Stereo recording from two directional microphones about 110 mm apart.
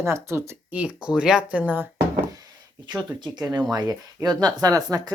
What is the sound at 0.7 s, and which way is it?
Speech, 10° right (ahead or behind).